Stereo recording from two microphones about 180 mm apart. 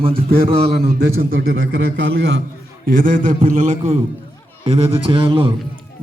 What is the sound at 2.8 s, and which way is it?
A man's voice, 50° right (ahead or behind).